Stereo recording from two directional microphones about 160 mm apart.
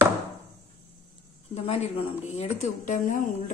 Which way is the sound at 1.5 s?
40° left (ahead or behind).